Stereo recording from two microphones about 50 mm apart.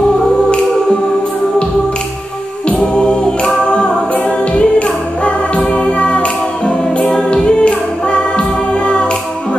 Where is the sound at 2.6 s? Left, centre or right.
Centre.